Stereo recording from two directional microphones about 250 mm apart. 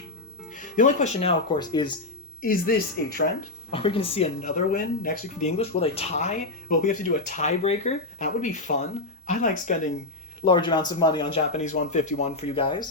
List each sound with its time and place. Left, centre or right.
0.8 s speech: left
2.4 s speech: left
3.7 s speech: left
10.4 s speech: centre